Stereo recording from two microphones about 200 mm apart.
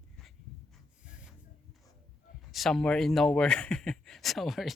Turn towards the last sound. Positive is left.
turn(degrees=0)  # may be behind; listen again after turning